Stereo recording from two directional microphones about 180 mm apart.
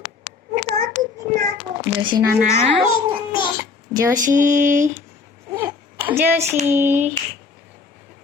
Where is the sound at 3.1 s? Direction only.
25° right (ahead or behind).